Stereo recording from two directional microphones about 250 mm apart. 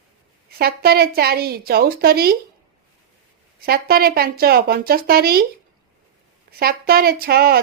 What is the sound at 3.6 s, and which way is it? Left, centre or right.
A woman's voice, right.